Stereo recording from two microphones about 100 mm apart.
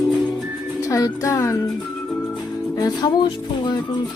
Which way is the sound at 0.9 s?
35° left (ahead or behind).